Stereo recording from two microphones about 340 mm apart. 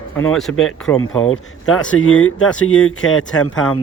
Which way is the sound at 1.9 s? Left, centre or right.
Left.